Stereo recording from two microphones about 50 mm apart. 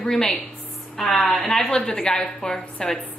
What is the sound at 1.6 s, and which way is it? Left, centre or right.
A woman's voice, centre.